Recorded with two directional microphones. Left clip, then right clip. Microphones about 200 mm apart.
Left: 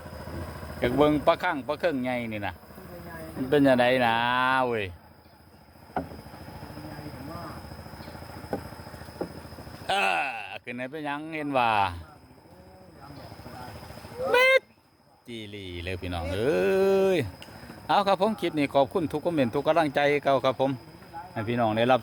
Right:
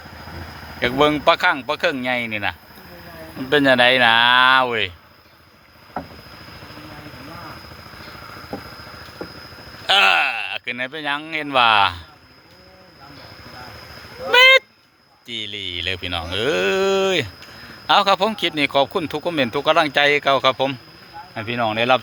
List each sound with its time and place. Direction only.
0.8 s a man's voice: 10° right (ahead or behind)
9.2 s a sound: 5° right (ahead or behind)
9.8 s speech: centre (ahead or behind)
14.3 s honk: 5° left (ahead or behind)
15.3 s a man's voice: 5° left (ahead or behind)
21.3 s speech: 20° left (ahead or behind)